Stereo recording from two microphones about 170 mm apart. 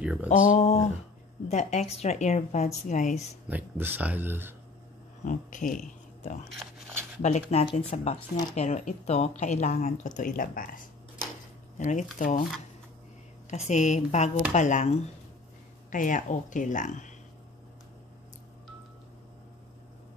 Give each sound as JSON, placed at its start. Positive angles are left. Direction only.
{"t": 0.0, "sound": "speech", "side_deg": -5}
{"t": 0.5, "sound": "speech", "side_deg": 45}
{"t": 3.4, "sound": "speech", "side_deg": -10}
{"t": 5.2, "sound": "speech", "side_deg": 50}
{"t": 11.8, "sound": "speech", "side_deg": 45}
{"t": 13.5, "sound": "speech", "side_deg": 45}